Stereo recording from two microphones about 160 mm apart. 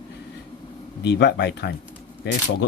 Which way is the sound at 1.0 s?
90° left.